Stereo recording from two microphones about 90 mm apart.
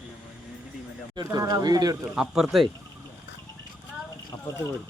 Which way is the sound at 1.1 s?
45° right (ahead or behind).